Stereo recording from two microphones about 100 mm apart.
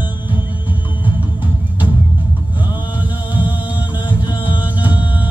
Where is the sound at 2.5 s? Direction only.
55° left (ahead or behind).